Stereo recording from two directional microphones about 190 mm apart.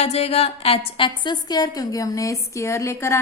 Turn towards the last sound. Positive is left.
turn(degrees=15)  # may be behind; listen again after turning